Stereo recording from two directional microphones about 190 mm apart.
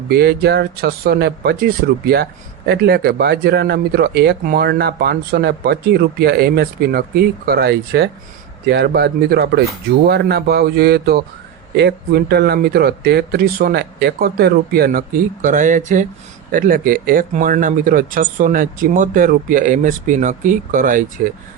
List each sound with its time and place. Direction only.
0.1 s speech: 60° right (ahead or behind)